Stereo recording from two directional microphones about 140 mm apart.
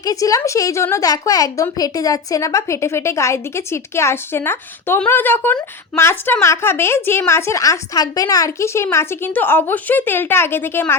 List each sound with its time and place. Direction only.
0.0 s a woman's voice: 25° left (ahead or behind)